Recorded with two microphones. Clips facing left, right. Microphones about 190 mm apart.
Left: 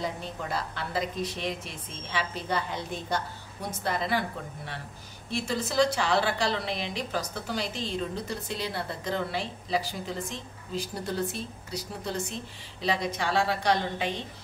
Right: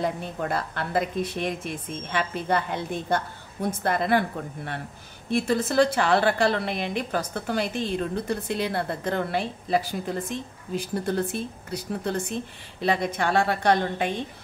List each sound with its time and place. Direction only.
0.0 s a woman's voice: 55° right (ahead or behind)